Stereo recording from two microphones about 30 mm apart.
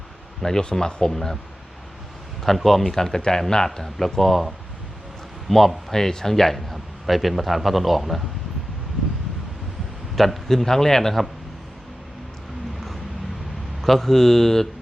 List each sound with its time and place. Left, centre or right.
0.6 s speech: left
1.1 s a man's voice: centre
2.4 s a man's voice: centre; by 3.4 s left
4.1 s speech: centre
10.2 s a man's voice: centre
13.8 s a man's voice: centre